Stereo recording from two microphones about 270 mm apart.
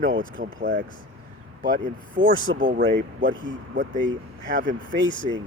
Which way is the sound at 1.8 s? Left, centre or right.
Right.